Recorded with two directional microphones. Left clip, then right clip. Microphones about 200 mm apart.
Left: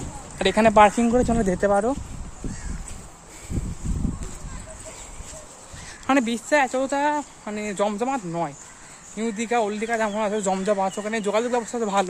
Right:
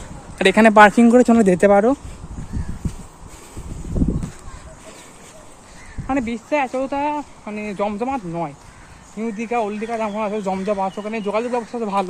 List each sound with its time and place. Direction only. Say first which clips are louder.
0.3 s speech: right 5 dB; 10° right (ahead or behind)
6.1 s speech: left 1 dB; 35° left (ahead or behind)